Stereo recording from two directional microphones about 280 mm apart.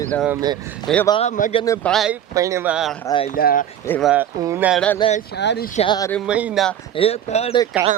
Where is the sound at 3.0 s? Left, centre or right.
Centre.